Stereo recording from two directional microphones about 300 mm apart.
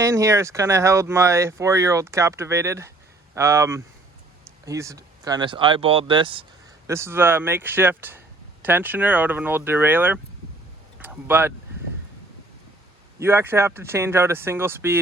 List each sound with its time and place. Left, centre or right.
0.0 s speech: centre
13.1 s speech: centre